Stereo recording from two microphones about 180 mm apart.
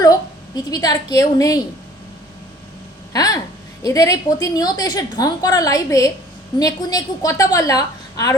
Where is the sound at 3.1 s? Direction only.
20° left (ahead or behind).